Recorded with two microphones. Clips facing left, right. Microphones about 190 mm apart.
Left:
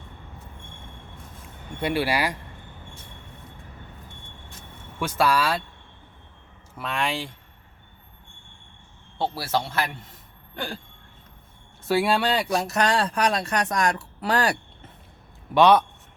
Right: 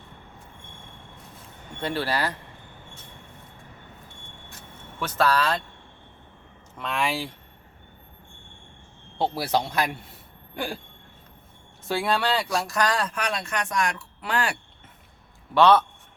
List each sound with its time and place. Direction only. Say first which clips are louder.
1.8 s speech: left 3 dB; 10° left (ahead or behind)
4.9 s speech: left 1 dB; 10° left (ahead or behind)
6.7 s speech: even; centre (ahead or behind)
9.1 s a man's voice: right 1 dB; 15° right (ahead or behind)
11.9 s speech: left 3 dB; 10° left (ahead or behind); by 14.6 s 40° left (ahead or behind)
15.5 s speech: left 1 dB; 15° left (ahead or behind)